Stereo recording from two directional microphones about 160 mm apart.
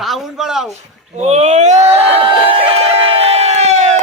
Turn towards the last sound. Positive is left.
turn(degrees=-45)  # may be behind; listen again after turning